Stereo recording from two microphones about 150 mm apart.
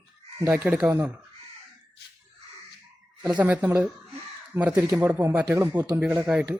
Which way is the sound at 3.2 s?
10° right (ahead or behind).